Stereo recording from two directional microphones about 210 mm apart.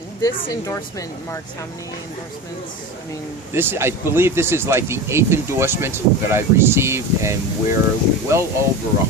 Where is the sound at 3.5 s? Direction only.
10° right (ahead or behind).